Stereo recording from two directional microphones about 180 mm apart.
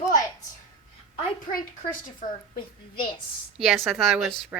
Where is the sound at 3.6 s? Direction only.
Centre (ahead or behind).